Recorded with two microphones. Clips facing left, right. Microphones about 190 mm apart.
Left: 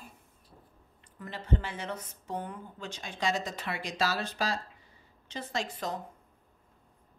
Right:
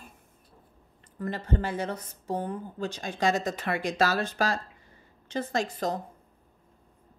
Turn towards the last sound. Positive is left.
turn(degrees=-45)  # may be behind; listen again after turning